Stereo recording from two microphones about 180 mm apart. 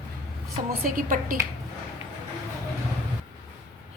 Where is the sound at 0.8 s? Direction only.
50° right (ahead or behind).